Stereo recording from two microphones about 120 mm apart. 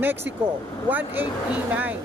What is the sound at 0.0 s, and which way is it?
Speech, 15° right (ahead or behind).